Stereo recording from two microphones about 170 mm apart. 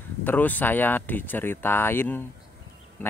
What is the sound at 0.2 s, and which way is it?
Speech, 10° left (ahead or behind).